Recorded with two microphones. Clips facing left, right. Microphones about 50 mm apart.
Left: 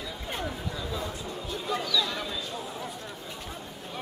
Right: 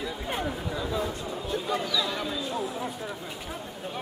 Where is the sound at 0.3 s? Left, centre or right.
Centre.